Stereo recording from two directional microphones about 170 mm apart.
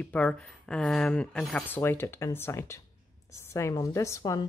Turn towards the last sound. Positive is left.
turn(degrees=20)  # may be behind; listen again after turning